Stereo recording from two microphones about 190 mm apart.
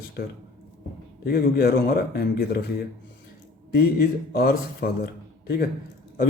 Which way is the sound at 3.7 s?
50° left (ahead or behind).